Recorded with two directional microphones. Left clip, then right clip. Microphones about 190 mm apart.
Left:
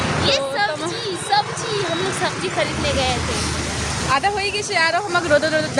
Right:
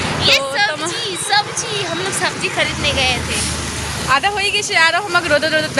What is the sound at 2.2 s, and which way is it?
Speech, 10° left (ahead or behind).